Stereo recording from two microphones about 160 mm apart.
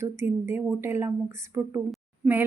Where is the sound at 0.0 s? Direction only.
15° right (ahead or behind).